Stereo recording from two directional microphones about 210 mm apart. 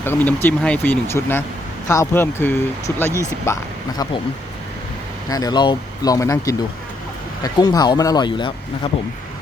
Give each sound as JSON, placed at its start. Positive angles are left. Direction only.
{"t": 0.0, "sound": "speech", "side_deg": 10}
{"t": 5.3, "sound": "speech", "side_deg": 20}